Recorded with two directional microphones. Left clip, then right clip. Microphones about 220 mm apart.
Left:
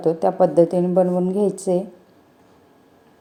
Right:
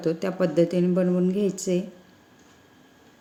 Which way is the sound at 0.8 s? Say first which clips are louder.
Left 6 dB; 35° left (ahead or behind).